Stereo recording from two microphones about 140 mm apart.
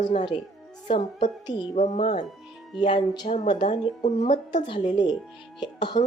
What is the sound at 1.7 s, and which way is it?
Speech, 55° left (ahead or behind).